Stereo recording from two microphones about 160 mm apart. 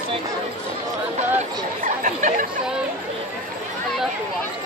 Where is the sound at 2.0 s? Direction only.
50° right (ahead or behind).